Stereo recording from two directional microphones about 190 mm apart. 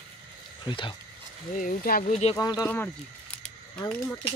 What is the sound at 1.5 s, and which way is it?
Speech, 45° left (ahead or behind).